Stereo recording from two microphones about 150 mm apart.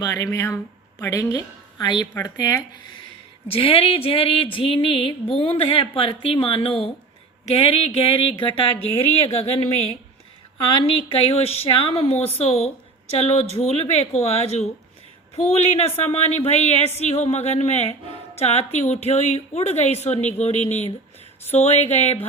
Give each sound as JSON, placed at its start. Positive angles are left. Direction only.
{"t": 0.0, "sound": "a woman's voice", "side_deg": 20}
{"t": 3.5, "sound": "speech", "side_deg": 40}